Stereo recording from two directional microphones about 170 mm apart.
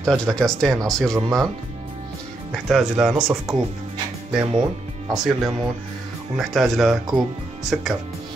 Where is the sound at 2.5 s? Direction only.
Centre (ahead or behind).